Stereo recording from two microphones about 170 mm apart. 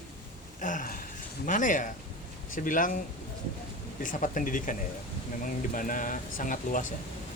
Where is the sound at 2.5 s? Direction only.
55° left (ahead or behind).